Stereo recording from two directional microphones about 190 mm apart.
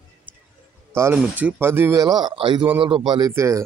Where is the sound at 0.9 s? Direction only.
10° right (ahead or behind).